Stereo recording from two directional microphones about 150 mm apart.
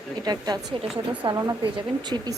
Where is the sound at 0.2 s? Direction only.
25° right (ahead or behind).